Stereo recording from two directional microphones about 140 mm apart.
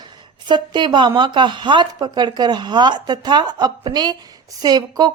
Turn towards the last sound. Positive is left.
turn(degrees=-30)  # may be behind; listen again after turning